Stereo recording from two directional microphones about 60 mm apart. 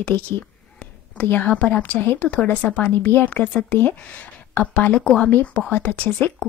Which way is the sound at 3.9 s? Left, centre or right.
Left.